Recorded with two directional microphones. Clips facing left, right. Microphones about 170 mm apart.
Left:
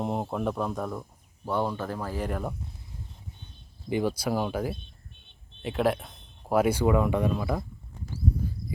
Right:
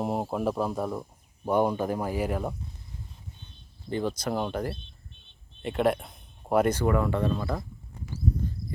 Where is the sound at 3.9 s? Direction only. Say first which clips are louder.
Left 2 dB; 10° left (ahead or behind).